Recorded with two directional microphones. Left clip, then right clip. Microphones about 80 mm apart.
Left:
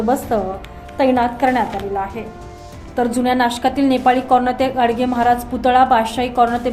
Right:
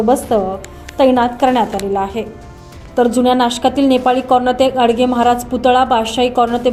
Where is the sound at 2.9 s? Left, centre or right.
Right.